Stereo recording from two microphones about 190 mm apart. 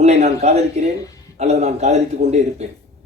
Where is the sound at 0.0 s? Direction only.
35° right (ahead or behind).